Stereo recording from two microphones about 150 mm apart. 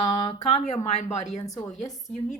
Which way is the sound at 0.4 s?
45° left (ahead or behind).